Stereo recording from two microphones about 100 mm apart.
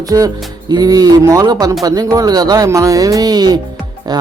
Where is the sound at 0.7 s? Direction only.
40° right (ahead or behind).